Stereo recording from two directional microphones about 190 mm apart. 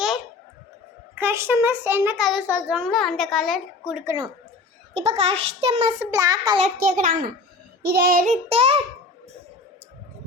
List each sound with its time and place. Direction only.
1.1 s a child's voice: 10° right (ahead or behind)
4.0 s a child's voice: 15° right (ahead or behind)
4.9 s a child's voice: 30° right (ahead or behind)
6.0 s a child's voice: 15° right (ahead or behind)
6.7 s a child's voice: 45° right (ahead or behind)
7.8 s child singing: 55° right (ahead or behind)
8.3 s a child's voice: 35° right (ahead or behind)